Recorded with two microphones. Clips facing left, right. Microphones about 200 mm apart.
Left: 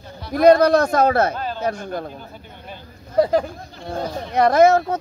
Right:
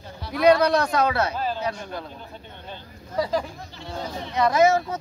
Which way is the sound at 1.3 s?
5° right (ahead or behind).